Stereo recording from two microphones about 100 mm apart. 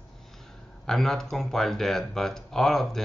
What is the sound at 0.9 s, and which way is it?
Speech, 5° left (ahead or behind).